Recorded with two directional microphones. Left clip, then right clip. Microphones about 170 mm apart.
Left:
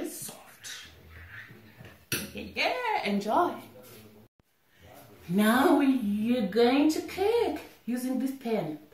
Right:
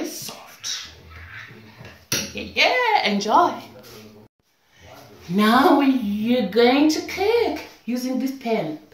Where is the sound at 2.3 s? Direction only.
15° left (ahead or behind).